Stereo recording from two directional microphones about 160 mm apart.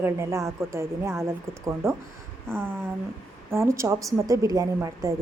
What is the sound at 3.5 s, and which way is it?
A woman's voice, 15° right (ahead or behind).